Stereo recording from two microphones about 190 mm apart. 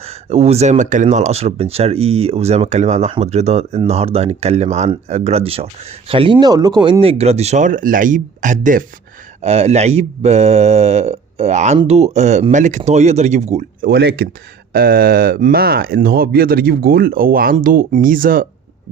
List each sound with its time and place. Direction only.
0.0 s speech: 35° right (ahead or behind)
13.8 s speech: 55° right (ahead or behind)